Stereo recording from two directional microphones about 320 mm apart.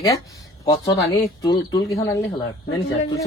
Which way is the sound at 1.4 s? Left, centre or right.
Centre.